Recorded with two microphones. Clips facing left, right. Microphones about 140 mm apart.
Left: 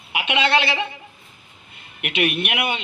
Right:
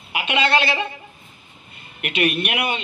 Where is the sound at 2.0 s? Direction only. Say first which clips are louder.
Right 1 dB; 15° left (ahead or behind).